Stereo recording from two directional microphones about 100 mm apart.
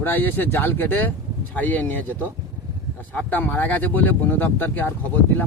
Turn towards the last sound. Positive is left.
turn(degrees=20)  # may be behind; listen again after turning